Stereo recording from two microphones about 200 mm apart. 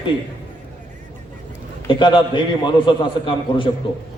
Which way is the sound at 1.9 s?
25° left (ahead or behind).